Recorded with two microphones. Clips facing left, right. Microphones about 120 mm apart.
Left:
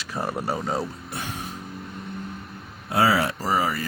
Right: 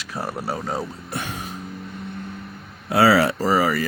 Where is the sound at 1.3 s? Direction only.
90° right.